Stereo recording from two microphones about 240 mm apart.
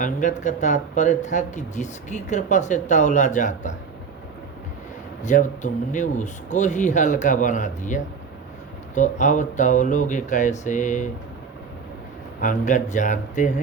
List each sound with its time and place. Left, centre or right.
0.0 s speech: left
5.2 s speech: left
12.4 s speech: left